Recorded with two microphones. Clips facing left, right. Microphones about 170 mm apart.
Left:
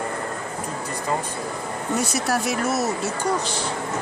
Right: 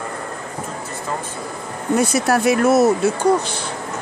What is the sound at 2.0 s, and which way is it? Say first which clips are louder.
Speech: right 9 dB; 55° right (ahead or behind).